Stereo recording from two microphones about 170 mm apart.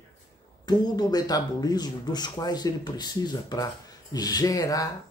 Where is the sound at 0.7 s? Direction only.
25° left (ahead or behind).